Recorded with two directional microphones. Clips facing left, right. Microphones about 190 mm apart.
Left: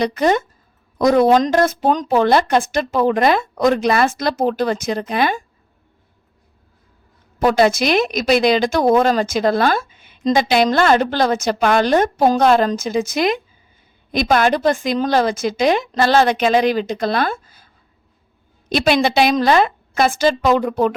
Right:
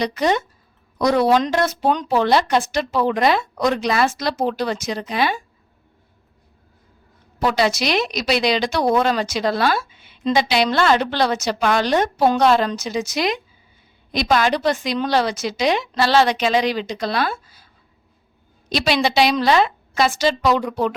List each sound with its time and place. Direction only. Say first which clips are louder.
0.0 s a woman's voice: left 3 dB; 50° left (ahead or behind)
7.3 s a woman's voice: left 5 dB; 50° left (ahead or behind)
18.7 s a woman's voice: left 4 dB; 50° left (ahead or behind)